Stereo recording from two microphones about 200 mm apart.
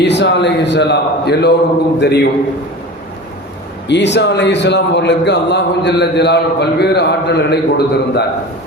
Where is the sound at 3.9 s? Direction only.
60° left (ahead or behind).